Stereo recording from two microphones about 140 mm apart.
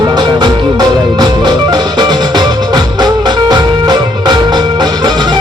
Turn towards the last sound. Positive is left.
turn(degrees=-30)  # may be behind; listen again after turning